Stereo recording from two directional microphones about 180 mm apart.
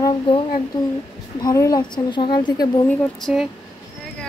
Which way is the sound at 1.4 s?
20° left (ahead or behind).